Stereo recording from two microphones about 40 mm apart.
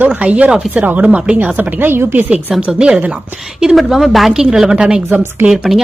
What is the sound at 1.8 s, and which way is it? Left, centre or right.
Speech, right.